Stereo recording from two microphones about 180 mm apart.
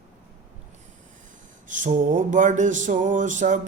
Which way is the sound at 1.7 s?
45° right (ahead or behind).